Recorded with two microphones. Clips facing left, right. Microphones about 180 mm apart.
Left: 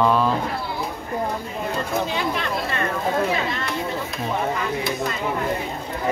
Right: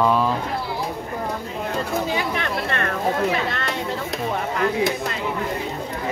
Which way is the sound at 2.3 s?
60° right (ahead or behind).